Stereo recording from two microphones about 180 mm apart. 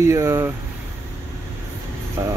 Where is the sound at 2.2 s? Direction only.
15° right (ahead or behind).